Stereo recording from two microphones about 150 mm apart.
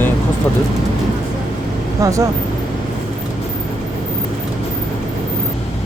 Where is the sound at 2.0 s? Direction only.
20° right (ahead or behind).